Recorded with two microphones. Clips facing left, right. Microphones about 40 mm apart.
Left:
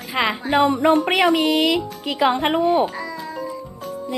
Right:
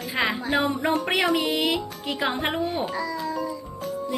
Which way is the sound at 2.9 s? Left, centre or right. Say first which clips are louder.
Right 1 dB; left.